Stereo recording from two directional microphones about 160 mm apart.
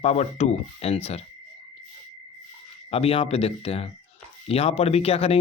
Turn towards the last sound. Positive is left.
turn(degrees=40)  # may be behind; listen again after turning